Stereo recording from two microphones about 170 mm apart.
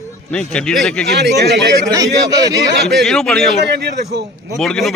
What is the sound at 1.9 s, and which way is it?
Speech, 20° right (ahead or behind).